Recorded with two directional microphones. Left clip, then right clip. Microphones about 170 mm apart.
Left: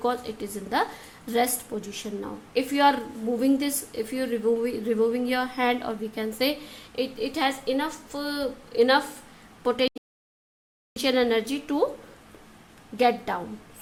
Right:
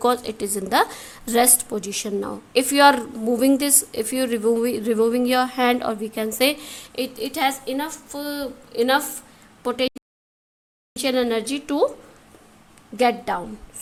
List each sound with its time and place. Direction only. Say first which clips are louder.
0.0 s a woman's voice: right 7 dB; 40° right (ahead or behind); by 9.9 s 15° right (ahead or behind)
10.9 s a woman's voice: right 1 dB; 15° right (ahead or behind)
13.0 s a woman's voice: right 3 dB; 20° right (ahead or behind)